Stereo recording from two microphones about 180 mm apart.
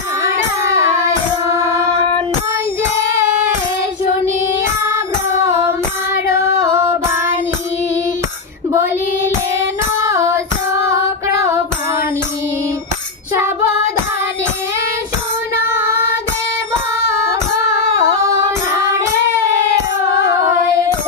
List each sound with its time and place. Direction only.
0.8 s music: 15° right (ahead or behind)
4.8 s music: 15° right (ahead or behind)
6.4 s female singing: 15° right (ahead or behind)
8.7 s female singing: 15° right (ahead or behind)
15.6 s child singing: 15° right (ahead or behind)
17.3 s female singing: 20° right (ahead or behind)